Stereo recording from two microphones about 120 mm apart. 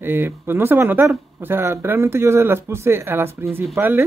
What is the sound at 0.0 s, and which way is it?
Speech, 20° right (ahead or behind).